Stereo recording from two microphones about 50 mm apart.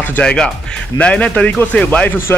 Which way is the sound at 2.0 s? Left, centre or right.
Left.